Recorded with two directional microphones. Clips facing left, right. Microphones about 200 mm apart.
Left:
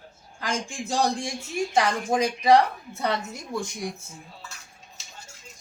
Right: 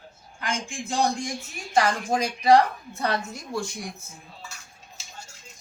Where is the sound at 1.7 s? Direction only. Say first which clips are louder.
Right 1 dB; 20° left (ahead or behind).